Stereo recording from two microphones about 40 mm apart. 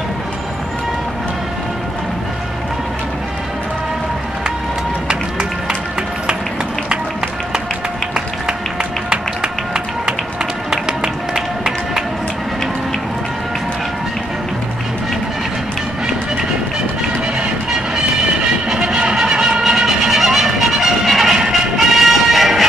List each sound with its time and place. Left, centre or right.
5.0 s run: centre
10.7 s music: centre
18.7 s a sound: centre
20.1 s music: centre